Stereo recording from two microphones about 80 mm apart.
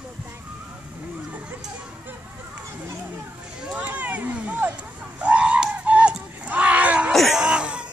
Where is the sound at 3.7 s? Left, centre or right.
Centre.